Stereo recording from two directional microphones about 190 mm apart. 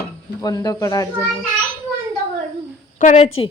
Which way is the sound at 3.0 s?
40° left (ahead or behind).